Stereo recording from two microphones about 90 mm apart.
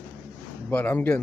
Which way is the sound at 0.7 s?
15° left (ahead or behind).